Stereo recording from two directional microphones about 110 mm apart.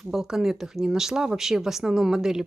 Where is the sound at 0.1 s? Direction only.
Centre (ahead or behind).